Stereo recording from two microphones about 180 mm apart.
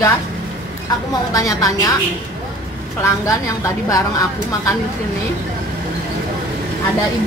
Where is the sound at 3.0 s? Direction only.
15° left (ahead or behind).